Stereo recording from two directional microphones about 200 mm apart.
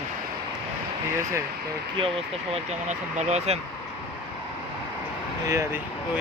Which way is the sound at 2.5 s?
35° right (ahead or behind).